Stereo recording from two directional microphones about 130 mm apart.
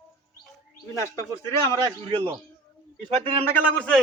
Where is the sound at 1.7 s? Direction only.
45° right (ahead or behind).